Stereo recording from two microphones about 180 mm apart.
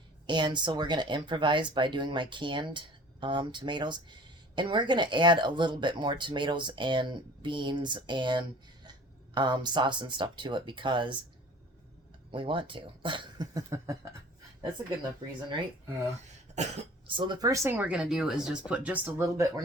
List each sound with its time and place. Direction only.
0.3 s speech: 25° right (ahead or behind)
12.3 s speech: 30° right (ahead or behind)
16.6 s speech: 30° right (ahead or behind); by 19.6 s 15° right (ahead or behind)